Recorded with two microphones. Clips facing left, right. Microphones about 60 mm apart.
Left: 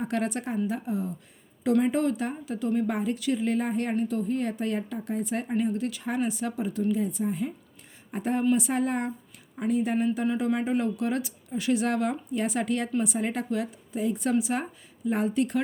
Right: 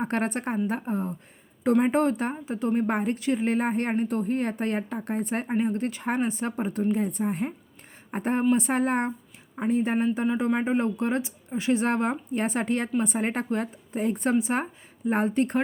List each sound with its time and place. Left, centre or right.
0.0 s speech: right